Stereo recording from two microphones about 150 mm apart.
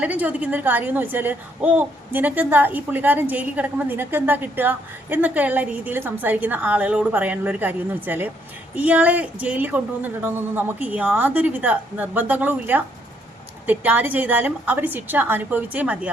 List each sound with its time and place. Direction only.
0.0 s a woman's voice: 10° right (ahead or behind)